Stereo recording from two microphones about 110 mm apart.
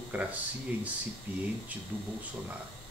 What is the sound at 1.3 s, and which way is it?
Speech, 15° right (ahead or behind).